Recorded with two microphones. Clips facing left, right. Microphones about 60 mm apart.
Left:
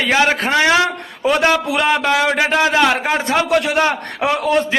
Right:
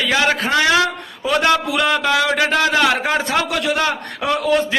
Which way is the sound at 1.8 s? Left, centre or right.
Centre.